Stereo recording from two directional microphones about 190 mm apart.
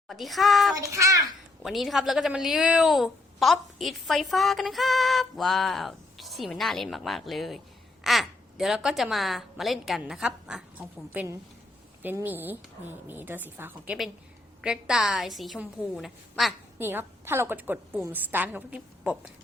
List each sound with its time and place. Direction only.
0.1 s a woman's voice: centre (ahead or behind)
0.8 s a woman's voice: 15° right (ahead or behind)
1.6 s a woman's voice: centre (ahead or behind)
16.7 s a woman's voice: 10° right (ahead or behind)